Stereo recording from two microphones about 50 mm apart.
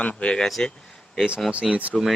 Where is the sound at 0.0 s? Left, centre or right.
Left.